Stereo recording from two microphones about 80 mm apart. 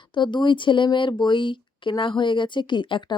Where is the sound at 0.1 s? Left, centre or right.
Left.